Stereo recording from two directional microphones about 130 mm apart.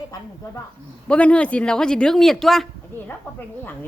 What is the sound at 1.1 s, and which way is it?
Speech, 10° left (ahead or behind).